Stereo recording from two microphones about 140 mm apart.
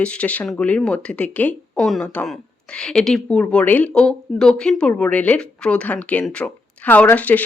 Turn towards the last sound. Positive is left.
turn(degrees=10)  # may be behind; listen again after turning